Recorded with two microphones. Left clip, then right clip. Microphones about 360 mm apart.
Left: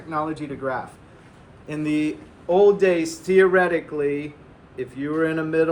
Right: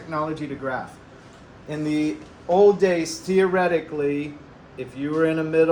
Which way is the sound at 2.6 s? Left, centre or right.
Left.